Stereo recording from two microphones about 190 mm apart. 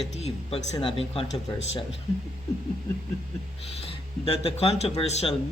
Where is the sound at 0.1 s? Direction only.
30° left (ahead or behind).